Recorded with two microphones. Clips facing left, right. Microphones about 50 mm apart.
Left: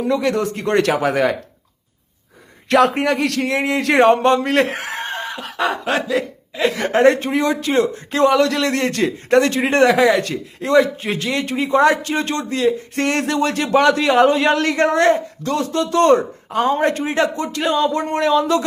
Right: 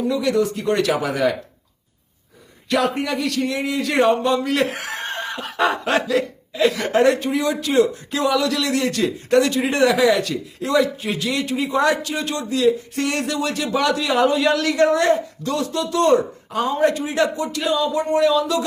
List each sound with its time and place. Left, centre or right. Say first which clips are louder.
0.1 s speech: left 2 dB; left
2.6 s speech: left 6 dB; left
4.4 s speech: left 3 dB; left
4.8 s speech: left 3 dB; centre
5.0 s snicker: left 1 dB; centre
6.5 s a man's voice: even; left